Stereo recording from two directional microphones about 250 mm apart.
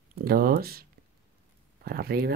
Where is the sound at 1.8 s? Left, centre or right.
Right.